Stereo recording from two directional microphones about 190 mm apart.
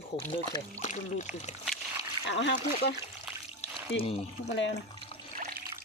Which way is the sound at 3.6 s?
30° left (ahead or behind).